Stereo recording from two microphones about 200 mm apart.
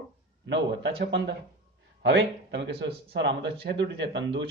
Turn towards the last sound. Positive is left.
turn(degrees=-60)  # may be behind; listen again after turning